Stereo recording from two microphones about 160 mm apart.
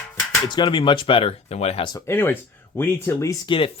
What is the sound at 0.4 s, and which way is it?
Speech, 30° left (ahead or behind).